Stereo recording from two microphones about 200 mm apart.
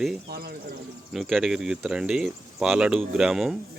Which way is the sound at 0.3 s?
50° right (ahead or behind).